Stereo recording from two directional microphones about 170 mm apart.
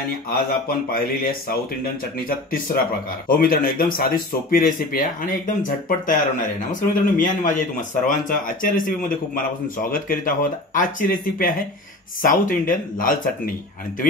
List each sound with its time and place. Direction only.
0.3 s speech: 60° left (ahead or behind)